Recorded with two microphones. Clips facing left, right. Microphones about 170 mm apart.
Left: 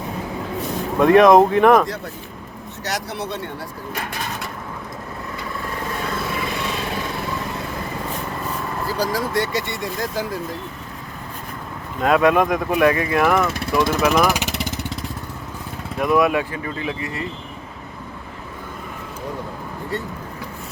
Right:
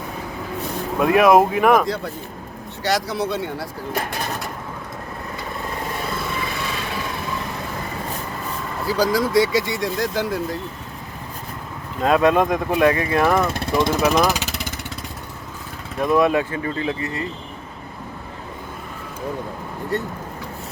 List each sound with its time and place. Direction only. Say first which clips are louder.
0.9 s speech: left 3 dB; 5° right (ahead or behind)
2.8 s speech: right 5 dB; 90° right
9.0 s speech: right 5 dB; 90° right
12.0 s speech: even; 25° right (ahead or behind)
16.0 s speech: even; 25° right (ahead or behind)